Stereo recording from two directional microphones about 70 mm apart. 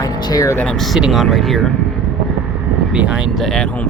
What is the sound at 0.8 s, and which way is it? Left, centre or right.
Speech, centre.